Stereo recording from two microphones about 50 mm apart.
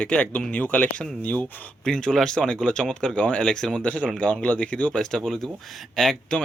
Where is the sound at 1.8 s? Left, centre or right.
Centre.